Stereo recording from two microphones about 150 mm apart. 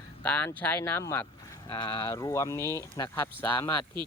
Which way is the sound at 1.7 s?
35° left (ahead or behind).